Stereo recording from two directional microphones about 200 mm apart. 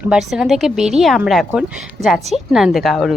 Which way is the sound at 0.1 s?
Centre (ahead or behind).